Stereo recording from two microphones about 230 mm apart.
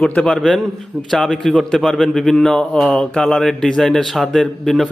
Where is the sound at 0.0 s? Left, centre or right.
Centre.